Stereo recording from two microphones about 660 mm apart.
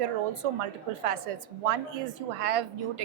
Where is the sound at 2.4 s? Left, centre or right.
Right.